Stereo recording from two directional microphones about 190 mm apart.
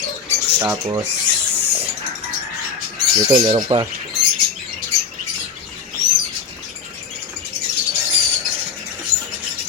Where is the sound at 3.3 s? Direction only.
30° right (ahead or behind).